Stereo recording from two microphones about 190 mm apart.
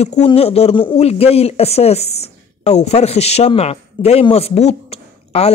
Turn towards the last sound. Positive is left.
turn(degrees=30)  # may be behind; listen again after turning